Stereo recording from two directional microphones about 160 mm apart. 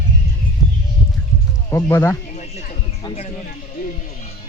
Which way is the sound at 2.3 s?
45° left (ahead or behind).